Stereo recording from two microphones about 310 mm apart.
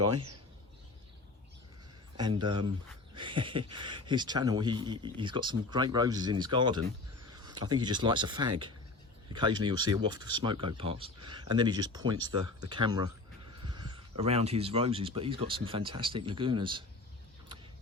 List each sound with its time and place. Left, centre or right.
2.1 s speech: centre